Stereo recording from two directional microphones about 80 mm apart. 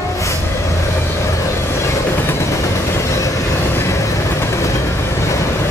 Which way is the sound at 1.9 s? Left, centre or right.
Left.